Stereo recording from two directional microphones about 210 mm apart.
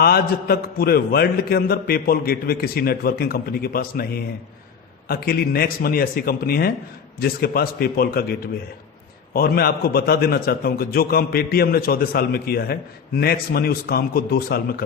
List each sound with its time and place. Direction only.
0.0 s a man's voice: 45° left (ahead or behind)